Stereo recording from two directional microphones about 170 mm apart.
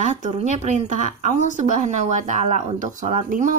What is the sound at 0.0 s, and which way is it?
A woman's voice, 45° right (ahead or behind).